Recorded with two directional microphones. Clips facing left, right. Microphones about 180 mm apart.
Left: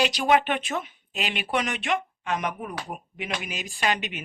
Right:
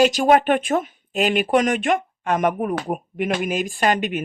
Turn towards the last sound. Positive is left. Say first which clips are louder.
# right 7 dB
turn(degrees=-50)  # may be behind; listen again after turning